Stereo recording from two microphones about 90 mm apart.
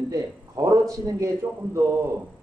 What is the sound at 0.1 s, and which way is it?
A man's voice, 40° right (ahead or behind).